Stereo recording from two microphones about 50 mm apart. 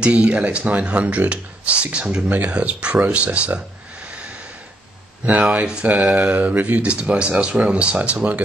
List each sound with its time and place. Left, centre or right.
0.0 s speech: right
5.4 s speech: centre
6.3 s speech: right